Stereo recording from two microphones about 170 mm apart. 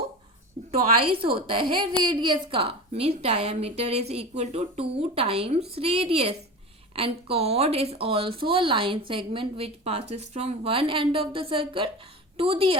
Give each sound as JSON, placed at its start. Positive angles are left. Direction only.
{"t": 1.0, "sound": "speech", "side_deg": -35}